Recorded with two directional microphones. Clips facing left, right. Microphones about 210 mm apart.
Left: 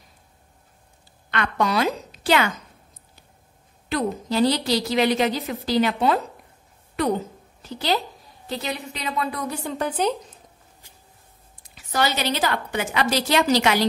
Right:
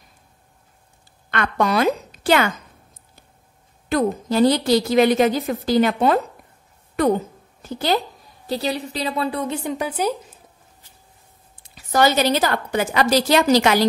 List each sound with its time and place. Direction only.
1.3 s a woman's voice: 50° right (ahead or behind)
3.9 s a woman's voice: 50° right (ahead or behind)
7.6 s a woman's voice: 50° right (ahead or behind)
8.5 s a woman's voice: 35° right (ahead or behind); by 10.1 s 10° right (ahead or behind)
11.6 s a woman's voice: 40° right (ahead or behind)